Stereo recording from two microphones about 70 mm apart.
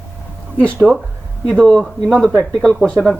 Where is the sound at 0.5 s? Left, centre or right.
Left.